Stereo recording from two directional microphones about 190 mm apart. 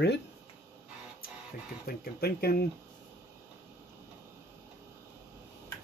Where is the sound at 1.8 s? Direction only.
55° left (ahead or behind).